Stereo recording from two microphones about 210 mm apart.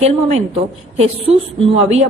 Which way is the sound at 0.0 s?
30° right (ahead or behind).